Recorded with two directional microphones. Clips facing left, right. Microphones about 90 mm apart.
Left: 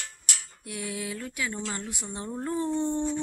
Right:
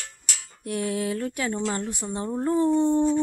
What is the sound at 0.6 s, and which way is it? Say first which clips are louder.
Speech: right 9 dB; 45° right (ahead or behind).